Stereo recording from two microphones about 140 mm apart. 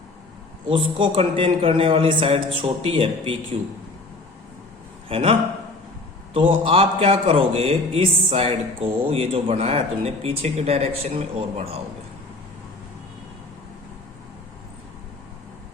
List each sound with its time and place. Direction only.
0.7 s a man's voice: 35° right (ahead or behind)
5.0 s a man's voice: 40° right (ahead or behind)